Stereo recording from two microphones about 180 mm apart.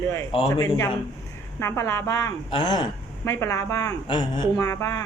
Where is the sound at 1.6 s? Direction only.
15° left (ahead or behind).